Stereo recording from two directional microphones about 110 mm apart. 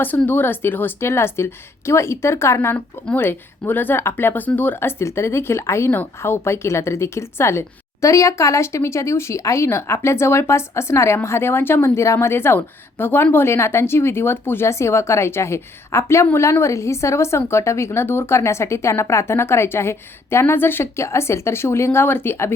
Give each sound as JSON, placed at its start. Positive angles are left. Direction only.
{"t": 0.3, "sound": "speech", "side_deg": 20}